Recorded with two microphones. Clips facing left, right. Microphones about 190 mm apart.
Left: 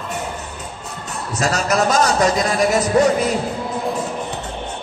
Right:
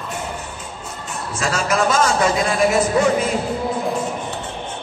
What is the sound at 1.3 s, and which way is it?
A man's voice, 40° left (ahead or behind).